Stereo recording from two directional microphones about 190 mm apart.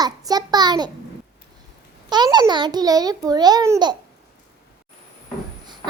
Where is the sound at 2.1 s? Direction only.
20° right (ahead or behind).